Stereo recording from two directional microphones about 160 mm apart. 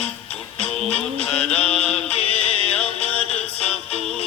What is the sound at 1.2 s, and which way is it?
Mantra, 5° left (ahead or behind).